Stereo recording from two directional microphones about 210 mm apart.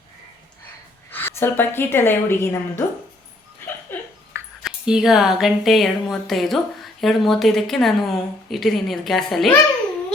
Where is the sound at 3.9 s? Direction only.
10° left (ahead or behind).